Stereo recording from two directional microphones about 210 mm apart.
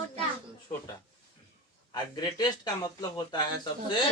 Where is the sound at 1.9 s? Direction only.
20° left (ahead or behind).